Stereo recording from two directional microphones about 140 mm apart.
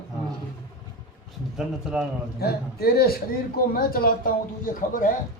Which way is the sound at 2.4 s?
90° left.